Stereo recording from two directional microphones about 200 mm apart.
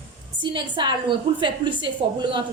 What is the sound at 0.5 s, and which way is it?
A woman's voice, 20° right (ahead or behind).